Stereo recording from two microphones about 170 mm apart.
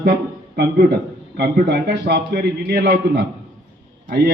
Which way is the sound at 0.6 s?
75° right (ahead or behind).